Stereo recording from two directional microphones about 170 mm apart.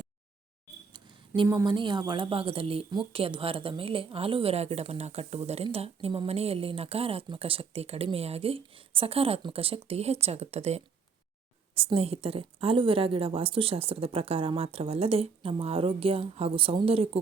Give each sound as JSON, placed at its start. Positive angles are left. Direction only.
{"t": 1.4, "sound": "a woman's voice", "side_deg": -25}